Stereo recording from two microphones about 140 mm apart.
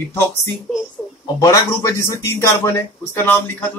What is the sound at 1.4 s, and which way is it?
Speech, 20° left (ahead or behind).